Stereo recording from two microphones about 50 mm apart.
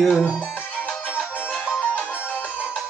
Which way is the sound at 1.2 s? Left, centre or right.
Left.